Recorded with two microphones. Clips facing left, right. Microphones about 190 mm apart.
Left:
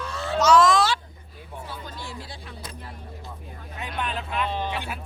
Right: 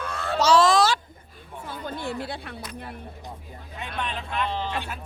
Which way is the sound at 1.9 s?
60° right (ahead or behind).